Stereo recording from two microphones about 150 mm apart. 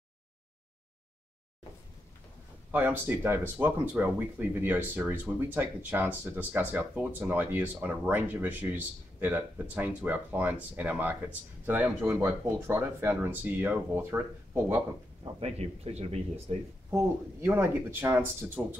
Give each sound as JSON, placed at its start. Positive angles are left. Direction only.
{"t": 2.7, "sound": "speech", "side_deg": -10}
{"t": 15.4, "sound": "speech", "side_deg": -45}
{"t": 17.4, "sound": "speech", "side_deg": -15}